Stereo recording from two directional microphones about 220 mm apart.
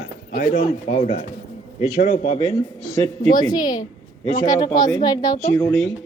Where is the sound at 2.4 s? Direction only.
15° left (ahead or behind).